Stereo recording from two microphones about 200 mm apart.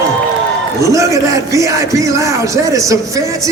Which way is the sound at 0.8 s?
15° right (ahead or behind).